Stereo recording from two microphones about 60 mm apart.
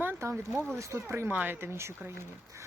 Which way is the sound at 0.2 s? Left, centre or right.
Right.